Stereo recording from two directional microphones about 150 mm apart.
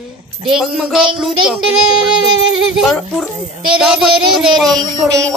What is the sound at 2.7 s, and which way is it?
Speech, centre (ahead or behind).